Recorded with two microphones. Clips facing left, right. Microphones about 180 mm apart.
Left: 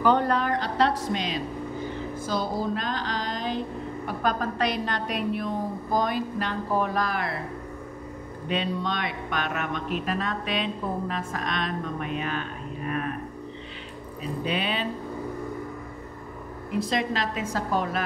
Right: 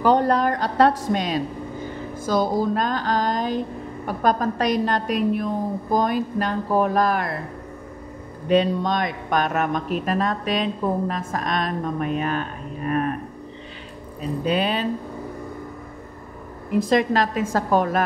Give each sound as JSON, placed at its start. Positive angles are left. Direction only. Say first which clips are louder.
{"t": 0.0, "sound": "a sound", "louder": "right 4 dB", "side_deg": -35}
{"t": 4.2, "sound": "a man's voice", "louder": "right 5 dB", "side_deg": -45}
{"t": 8.5, "sound": "a man's voice", "louder": "right 9 dB", "side_deg": -40}
{"t": 14.4, "sound": "speech", "louder": "right 6 dB", "side_deg": -40}
{"t": 16.7, "sound": "a man's voice", "louder": "right 8 dB", "side_deg": -50}